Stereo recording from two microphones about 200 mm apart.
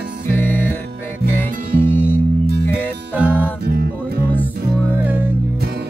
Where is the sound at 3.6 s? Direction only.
50° right (ahead or behind).